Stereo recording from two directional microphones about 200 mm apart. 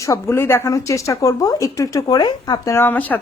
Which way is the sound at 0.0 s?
15° left (ahead or behind).